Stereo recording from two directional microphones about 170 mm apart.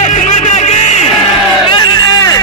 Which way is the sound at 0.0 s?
45° left (ahead or behind).